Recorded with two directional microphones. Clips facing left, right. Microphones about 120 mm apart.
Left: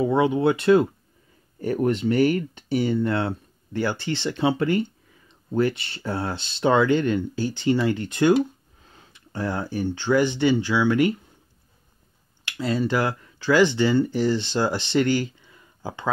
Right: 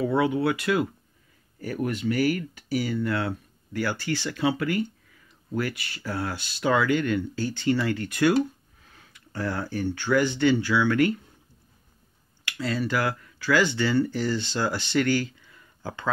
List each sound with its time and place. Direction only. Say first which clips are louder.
0.0 s speech: left 3 dB; 20° left (ahead or behind)
12.4 s speech: left 4 dB; 20° left (ahead or behind)